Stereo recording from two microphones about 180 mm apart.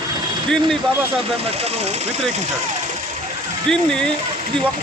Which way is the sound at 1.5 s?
35° right (ahead or behind).